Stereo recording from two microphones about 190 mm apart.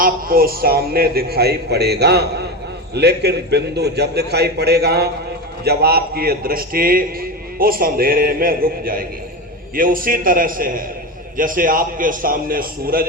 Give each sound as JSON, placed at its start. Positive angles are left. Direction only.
{"t": 0.0, "sound": "a man's voice", "side_deg": -50}